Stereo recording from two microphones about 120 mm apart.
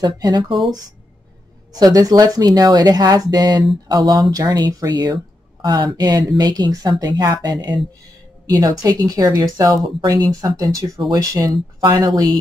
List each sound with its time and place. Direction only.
0.0 s speech: 35° right (ahead or behind)
1.7 s speech: 30° right (ahead or behind)